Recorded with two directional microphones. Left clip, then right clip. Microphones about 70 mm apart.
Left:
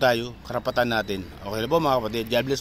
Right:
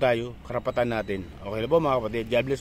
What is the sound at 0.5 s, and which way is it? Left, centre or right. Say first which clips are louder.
Speech: left 2 dB; right.